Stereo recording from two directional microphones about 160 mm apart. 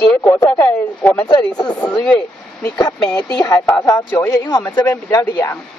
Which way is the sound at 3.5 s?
15° left (ahead or behind).